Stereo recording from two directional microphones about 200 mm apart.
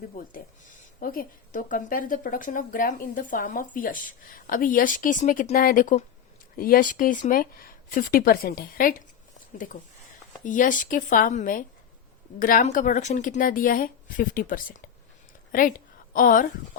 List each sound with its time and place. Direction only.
0.9 s speech: 45° left (ahead or behind)
10.4 s speech: 40° left (ahead or behind)